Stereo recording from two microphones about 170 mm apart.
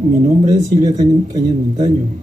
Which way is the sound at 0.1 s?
45° right (ahead or behind).